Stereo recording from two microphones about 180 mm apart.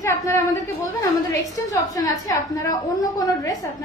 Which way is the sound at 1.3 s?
20° left (ahead or behind).